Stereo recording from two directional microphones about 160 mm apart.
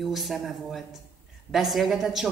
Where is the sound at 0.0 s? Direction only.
Centre (ahead or behind).